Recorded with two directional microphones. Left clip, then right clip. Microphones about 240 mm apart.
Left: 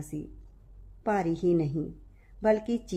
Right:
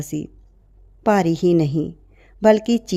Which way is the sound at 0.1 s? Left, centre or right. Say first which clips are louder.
Right 9 dB; right.